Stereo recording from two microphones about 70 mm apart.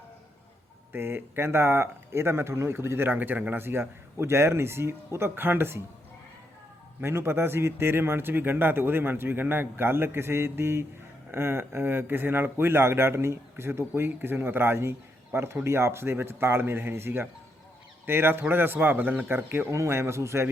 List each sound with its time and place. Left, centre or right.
0.9 s speech: right
7.0 s a man's voice: right
19.7 s speech: right